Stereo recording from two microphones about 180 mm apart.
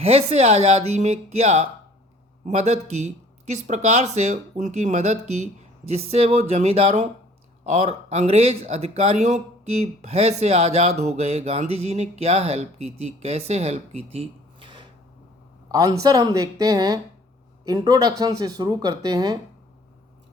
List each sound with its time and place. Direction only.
0.0 s speech: 35° right (ahead or behind)